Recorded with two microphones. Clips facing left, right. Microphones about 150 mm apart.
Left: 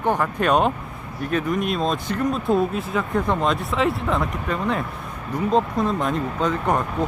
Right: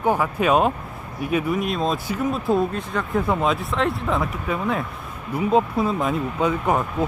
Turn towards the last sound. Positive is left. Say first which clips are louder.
# right 1 dB
turn(degrees=-10)  # may be behind; listen again after turning